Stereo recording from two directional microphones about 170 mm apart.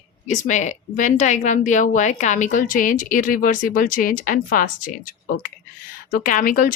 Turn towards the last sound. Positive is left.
turn(degrees=55)  # may be behind; listen again after turning